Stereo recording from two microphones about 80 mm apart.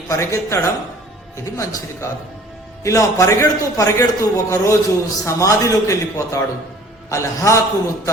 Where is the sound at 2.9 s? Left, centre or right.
Left.